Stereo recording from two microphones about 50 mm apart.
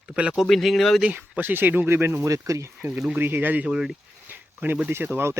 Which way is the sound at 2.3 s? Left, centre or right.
Right.